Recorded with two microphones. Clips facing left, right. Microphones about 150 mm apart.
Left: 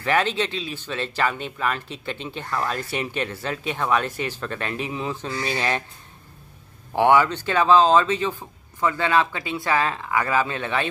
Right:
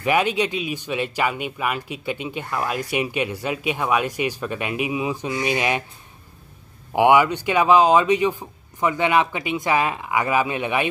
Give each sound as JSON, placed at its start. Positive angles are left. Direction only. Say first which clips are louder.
{"t": 0.0, "sound": "speech", "louder": "right 2 dB", "side_deg": -10}
{"t": 6.9, "sound": "speech", "louder": "right 2 dB", "side_deg": -15}